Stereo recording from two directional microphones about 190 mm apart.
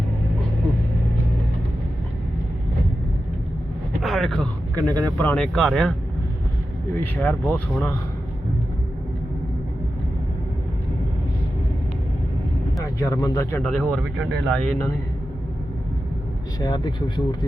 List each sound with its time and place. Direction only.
4.0 s speech: centre (ahead or behind)
6.9 s speech: 10° left (ahead or behind)
12.8 s speech: 15° left (ahead or behind)
16.6 s speech: 25° left (ahead or behind)